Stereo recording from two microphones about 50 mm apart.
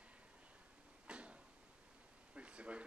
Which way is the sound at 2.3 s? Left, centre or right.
Right.